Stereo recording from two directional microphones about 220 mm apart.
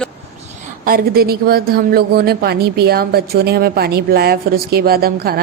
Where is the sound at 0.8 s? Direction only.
45° right (ahead or behind).